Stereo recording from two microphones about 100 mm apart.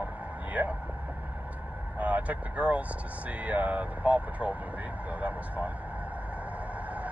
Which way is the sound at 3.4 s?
15° right (ahead or behind).